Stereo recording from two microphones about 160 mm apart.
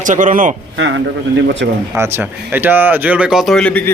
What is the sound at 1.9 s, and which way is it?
Speech, 15° right (ahead or behind).